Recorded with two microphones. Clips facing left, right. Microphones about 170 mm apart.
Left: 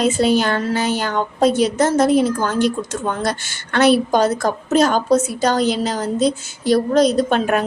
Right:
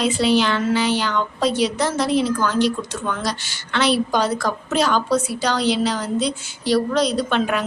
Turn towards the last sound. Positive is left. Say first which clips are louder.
# left 4 dB
turn(degrees=45)  # may be behind; listen again after turning